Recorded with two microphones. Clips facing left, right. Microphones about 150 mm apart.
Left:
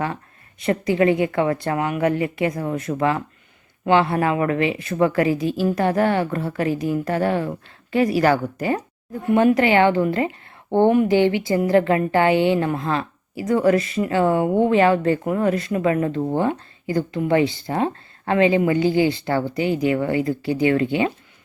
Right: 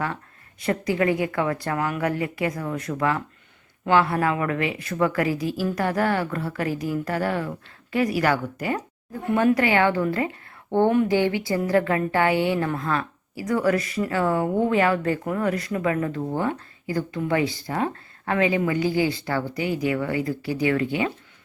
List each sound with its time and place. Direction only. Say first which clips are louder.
0.6 s a woman's voice: left 4 dB; 25° left (ahead or behind)
10.8 s speech: left 4 dB; 10° left (ahead or behind)
11.1 s a woman's voice: left 4 dB; 25° left (ahead or behind)